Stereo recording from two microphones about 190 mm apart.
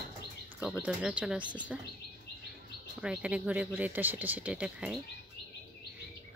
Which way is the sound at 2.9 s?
5° right (ahead or behind).